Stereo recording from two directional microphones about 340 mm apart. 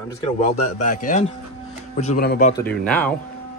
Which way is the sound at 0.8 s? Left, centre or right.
Left.